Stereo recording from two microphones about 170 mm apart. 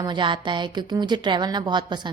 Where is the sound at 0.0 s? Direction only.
25° right (ahead or behind).